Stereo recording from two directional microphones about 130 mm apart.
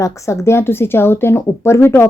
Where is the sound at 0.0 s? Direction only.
25° left (ahead or behind).